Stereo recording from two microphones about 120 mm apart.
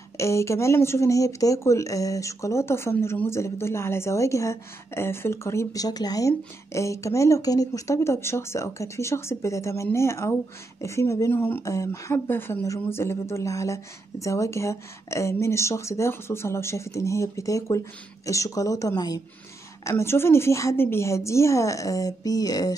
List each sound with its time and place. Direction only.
0.2 s speech: 25° left (ahead or behind)